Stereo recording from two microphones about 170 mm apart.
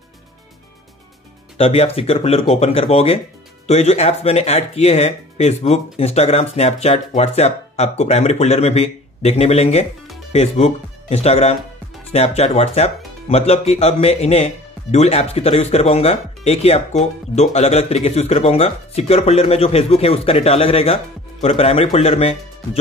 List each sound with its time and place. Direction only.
1.6 s speech: 35° left (ahead or behind)